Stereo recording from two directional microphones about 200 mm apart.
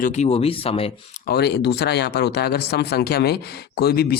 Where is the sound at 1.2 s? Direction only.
55° left (ahead or behind).